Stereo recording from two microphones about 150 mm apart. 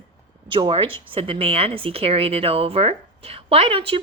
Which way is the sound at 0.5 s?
35° right (ahead or behind).